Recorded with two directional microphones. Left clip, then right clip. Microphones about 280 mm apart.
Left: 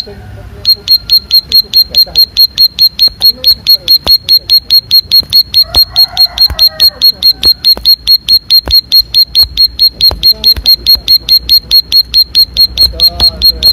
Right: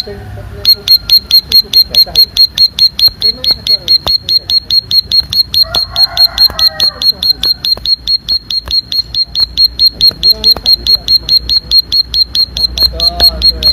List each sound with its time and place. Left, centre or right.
0.6 s speech: centre
1.3 s a sound: centre
1.7 s speech: centre
3.2 s squawk: centre
5.7 s a sound: centre
10.4 s bird: centre